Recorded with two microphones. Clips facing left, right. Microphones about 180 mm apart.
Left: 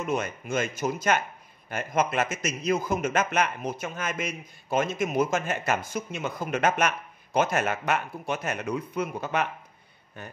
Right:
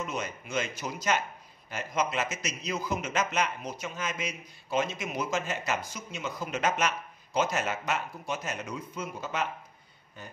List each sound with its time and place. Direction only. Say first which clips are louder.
0.0 s a man's voice: left 6 dB; 55° left (ahead or behind)